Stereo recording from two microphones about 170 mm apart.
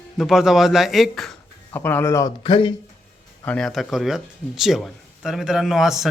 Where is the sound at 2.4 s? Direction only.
30° left (ahead or behind).